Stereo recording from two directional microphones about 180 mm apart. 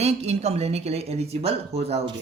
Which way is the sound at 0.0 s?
35° right (ahead or behind).